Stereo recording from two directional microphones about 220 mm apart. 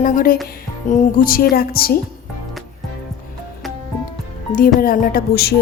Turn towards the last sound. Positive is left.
turn(degrees=45)  # may be behind; listen again after turning